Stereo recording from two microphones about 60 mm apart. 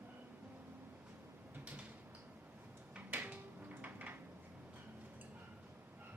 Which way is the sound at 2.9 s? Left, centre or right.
Right.